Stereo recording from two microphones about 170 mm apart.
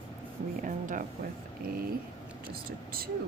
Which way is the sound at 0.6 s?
50° right (ahead or behind).